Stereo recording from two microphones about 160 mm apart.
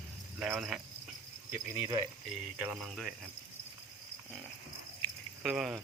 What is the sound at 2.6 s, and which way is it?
Speech, 5° right (ahead or behind).